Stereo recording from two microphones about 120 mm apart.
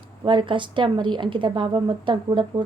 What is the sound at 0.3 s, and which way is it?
A woman's voice, 40° right (ahead or behind).